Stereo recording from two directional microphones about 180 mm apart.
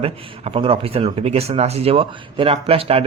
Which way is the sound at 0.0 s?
30° right (ahead or behind).